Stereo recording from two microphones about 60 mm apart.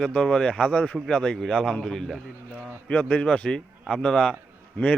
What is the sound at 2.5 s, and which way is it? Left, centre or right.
Speech, centre.